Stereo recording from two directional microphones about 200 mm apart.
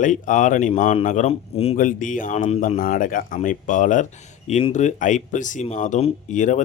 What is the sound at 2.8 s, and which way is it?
Speech, 45° left (ahead or behind).